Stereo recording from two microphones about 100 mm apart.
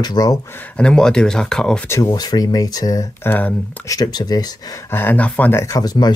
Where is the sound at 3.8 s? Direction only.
35° left (ahead or behind).